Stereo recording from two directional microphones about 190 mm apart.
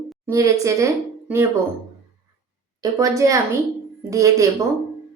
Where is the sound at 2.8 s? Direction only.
15° right (ahead or behind).